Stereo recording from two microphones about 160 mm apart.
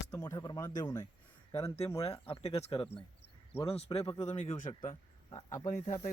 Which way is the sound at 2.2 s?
35° left (ahead or behind).